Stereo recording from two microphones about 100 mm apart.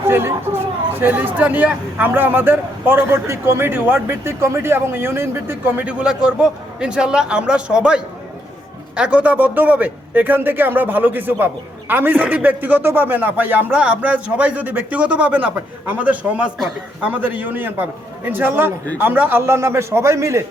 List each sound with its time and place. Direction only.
0.1 s a man's voice: 25° right (ahead or behind)